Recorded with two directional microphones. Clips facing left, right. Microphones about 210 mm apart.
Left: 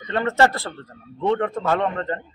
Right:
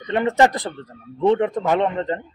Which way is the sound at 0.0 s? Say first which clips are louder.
Right 2 dB; 15° right (ahead or behind).